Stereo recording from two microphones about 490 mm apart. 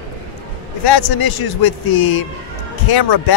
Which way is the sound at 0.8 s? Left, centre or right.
Left.